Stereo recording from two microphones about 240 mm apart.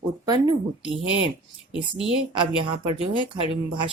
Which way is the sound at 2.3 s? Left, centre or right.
Right.